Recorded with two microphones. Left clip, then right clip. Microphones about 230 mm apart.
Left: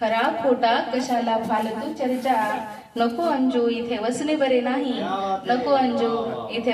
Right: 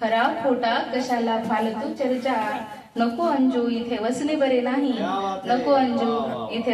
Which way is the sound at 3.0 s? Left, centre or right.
Left.